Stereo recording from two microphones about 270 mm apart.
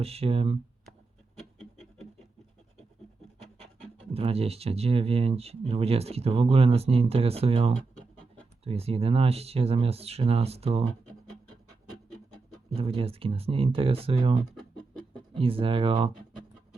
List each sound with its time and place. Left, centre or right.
0.0 s speech: right
1.8 s scratch: centre
4.1 s speech: right
12.7 s speech: right